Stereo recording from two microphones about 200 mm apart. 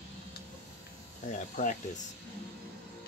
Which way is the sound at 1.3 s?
40° left (ahead or behind).